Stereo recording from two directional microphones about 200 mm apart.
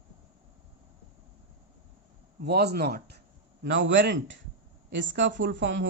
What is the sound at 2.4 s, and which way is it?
Speech, 55° right (ahead or behind).